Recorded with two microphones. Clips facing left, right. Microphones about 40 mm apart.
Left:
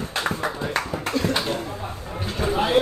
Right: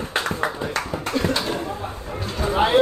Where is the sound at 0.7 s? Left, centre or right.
Centre.